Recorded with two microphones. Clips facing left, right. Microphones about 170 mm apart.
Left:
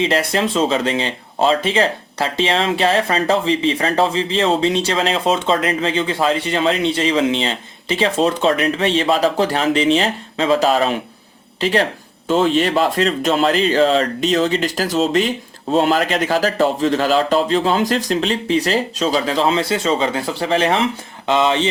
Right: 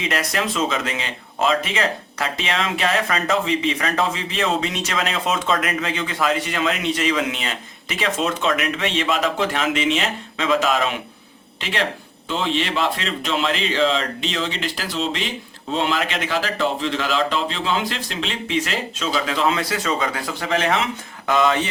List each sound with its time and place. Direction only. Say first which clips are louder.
0.0 s speech: left 6 dB; 30° left (ahead or behind)